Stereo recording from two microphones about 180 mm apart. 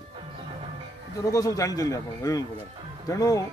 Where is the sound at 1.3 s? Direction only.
20° left (ahead or behind).